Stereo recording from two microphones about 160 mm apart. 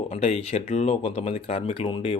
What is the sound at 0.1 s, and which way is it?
Speech, 40° left (ahead or behind).